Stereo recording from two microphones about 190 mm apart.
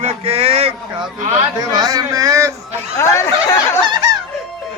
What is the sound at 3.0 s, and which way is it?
Speech, 15° left (ahead or behind).